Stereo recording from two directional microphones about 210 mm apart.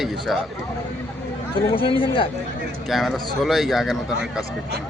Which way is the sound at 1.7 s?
25° left (ahead or behind).